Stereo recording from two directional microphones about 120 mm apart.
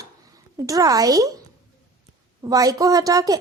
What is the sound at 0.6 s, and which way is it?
Speech, 30° right (ahead or behind).